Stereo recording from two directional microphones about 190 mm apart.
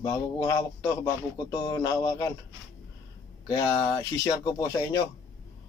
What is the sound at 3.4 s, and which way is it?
Speech, 20° left (ahead or behind).